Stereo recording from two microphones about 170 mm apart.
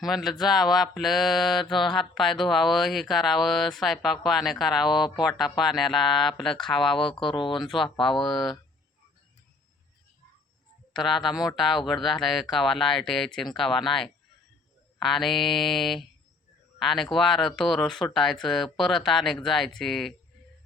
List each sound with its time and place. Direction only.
0.0 s speech: centre (ahead or behind)
7.3 s speech: 30° left (ahead or behind)
7.6 s speech: centre (ahead or behind)
10.9 s speech: centre (ahead or behind)